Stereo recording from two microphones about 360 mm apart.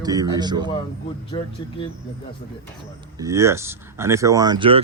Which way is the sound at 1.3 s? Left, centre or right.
Centre.